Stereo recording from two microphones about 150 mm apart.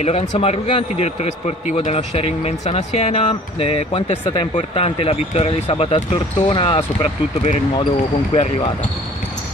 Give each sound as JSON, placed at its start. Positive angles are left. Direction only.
{"t": 0.0, "sound": "speech", "side_deg": 40}
{"t": 8.3, "sound": "speech", "side_deg": 40}